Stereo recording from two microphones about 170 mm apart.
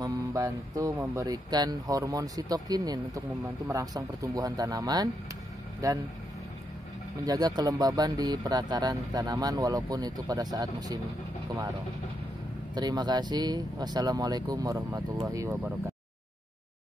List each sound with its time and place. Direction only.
0.0 s speech: 20° right (ahead or behind)
3.4 s speech: 10° right (ahead or behind)
3.8 s speech: 20° right (ahead or behind)
7.2 s speech: 25° right (ahead or behind)
12.7 s speech: 25° right (ahead or behind)